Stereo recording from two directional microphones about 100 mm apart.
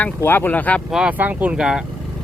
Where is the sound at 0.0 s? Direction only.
20° left (ahead or behind).